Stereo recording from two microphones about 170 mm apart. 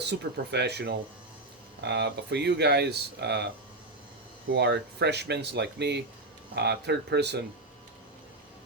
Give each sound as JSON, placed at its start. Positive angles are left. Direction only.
{"t": 0.0, "sound": "speech", "side_deg": -80}
{"t": 4.5, "sound": "speech", "side_deg": -80}